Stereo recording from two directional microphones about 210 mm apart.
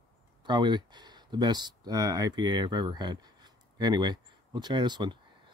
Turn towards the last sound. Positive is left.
turn(degrees=-20)  # may be behind; listen again after turning